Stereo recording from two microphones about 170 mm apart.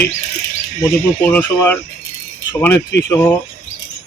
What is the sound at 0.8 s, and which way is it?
Speech, 10° left (ahead or behind).